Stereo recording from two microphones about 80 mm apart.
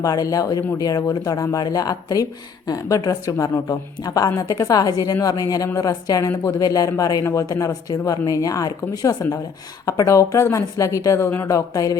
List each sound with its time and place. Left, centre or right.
0.0 s speech: left